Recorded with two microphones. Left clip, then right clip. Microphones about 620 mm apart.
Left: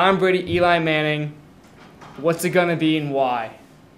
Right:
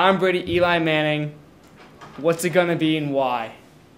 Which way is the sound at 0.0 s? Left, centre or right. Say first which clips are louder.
Left 1 dB; centre.